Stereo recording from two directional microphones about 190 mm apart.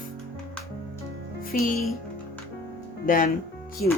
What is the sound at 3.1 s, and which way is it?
Speech, 45° left (ahead or behind).